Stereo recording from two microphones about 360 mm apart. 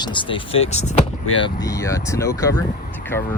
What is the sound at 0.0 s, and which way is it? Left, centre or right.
Speech, centre.